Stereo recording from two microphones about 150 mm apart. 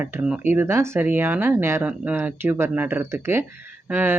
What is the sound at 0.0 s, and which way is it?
Speech, 15° right (ahead or behind).